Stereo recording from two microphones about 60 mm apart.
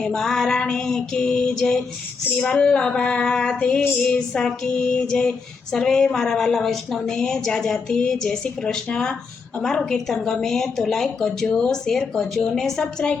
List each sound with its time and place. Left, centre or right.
0.0 s a woman's voice: centre